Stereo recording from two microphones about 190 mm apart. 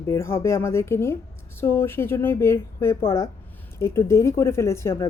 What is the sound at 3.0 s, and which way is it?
Speech, 30° left (ahead or behind).